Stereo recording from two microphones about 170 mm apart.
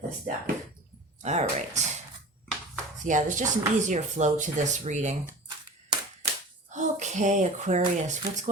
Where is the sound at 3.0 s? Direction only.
45° right (ahead or behind).